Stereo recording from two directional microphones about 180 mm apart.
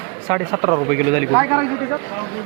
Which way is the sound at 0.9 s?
Centre (ahead or behind).